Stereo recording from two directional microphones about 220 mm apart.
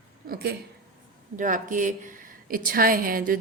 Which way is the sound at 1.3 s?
35° right (ahead or behind).